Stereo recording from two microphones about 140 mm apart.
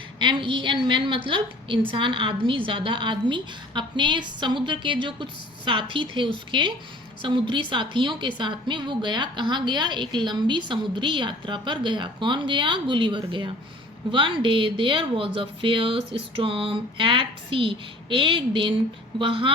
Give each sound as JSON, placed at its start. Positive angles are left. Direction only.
{"t": 0.2, "sound": "a woman's voice", "side_deg": -35}